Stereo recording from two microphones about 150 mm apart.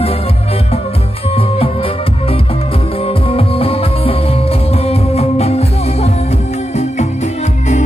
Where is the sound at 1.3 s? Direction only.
40° left (ahead or behind).